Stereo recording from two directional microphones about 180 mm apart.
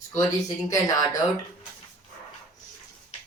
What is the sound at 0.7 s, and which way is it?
Speech, 20° left (ahead or behind).